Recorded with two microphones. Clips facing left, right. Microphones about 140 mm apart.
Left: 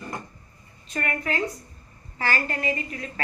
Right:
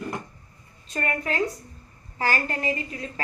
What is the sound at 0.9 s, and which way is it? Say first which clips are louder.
A woman's voice: right 1 dB; 35° right (ahead or behind).